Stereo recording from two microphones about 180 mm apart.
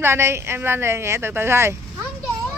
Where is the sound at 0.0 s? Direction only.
15° right (ahead or behind).